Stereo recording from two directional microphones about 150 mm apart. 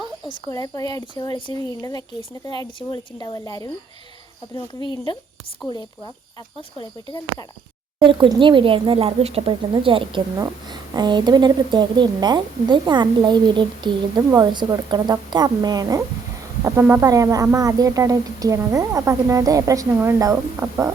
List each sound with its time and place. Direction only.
0.3 s speech: 25° left (ahead or behind)
6.7 s speech: 30° left (ahead or behind)
7.9 s speech: 35° right (ahead or behind)
10.3 s a woman's voice: 25° right (ahead or behind)